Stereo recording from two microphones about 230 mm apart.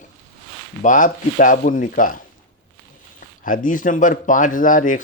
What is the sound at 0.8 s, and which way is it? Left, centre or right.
Speech, left.